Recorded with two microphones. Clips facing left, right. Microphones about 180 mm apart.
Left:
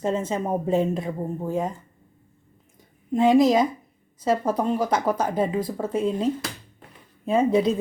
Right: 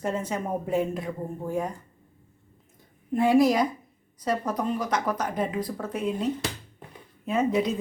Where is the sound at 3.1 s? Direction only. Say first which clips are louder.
Left 3 dB; 20° left (ahead or behind).